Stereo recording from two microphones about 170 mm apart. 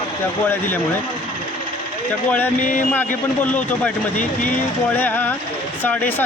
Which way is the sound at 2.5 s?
50° left (ahead or behind).